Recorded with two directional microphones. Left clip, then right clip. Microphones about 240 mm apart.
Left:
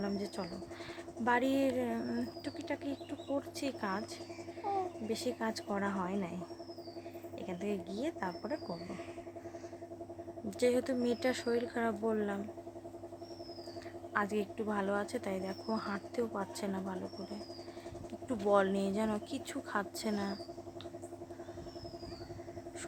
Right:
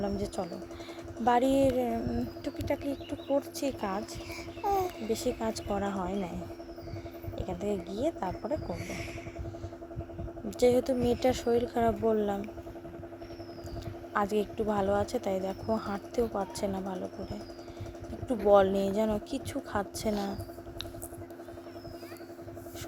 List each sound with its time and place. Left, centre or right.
0.0 s speech: centre
5.0 s speech: centre
7.3 s speech: centre
10.6 s speech: centre
14.1 s speech: centre
18.3 s speech: centre